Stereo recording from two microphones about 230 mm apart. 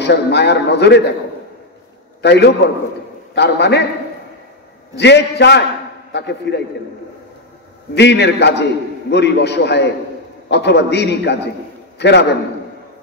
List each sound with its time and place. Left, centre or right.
0.0 s a man's voice: left
2.2 s a man's voice: left
4.9 s a man's voice: left
7.9 s a man's voice: left